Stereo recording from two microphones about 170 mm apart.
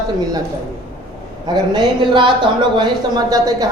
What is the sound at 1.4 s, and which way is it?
Speech, 25° right (ahead or behind).